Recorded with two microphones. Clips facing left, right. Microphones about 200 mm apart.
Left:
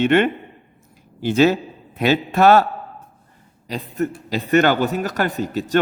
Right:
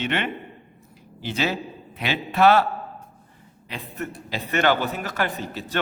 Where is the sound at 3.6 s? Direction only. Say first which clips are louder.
Left 9 dB; 40° left (ahead or behind).